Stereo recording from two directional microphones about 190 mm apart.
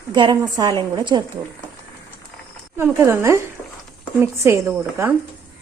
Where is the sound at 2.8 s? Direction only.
15° right (ahead or behind).